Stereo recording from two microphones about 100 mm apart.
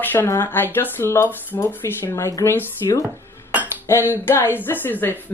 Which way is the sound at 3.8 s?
25° left (ahead or behind).